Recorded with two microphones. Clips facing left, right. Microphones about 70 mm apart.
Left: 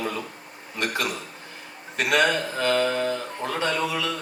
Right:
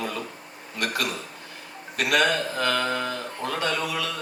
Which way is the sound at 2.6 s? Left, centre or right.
Left.